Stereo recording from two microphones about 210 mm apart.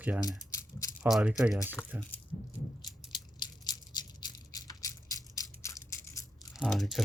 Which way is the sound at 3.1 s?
20° left (ahead or behind).